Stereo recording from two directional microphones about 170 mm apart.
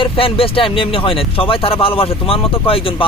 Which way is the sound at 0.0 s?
30° left (ahead or behind).